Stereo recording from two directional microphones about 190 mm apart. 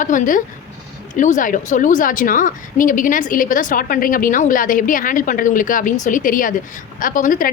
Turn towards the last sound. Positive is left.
turn(degrees=45)  # may be behind; listen again after turning